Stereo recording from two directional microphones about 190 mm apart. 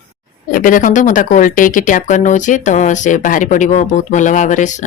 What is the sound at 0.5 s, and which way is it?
Speech, 45° left (ahead or behind).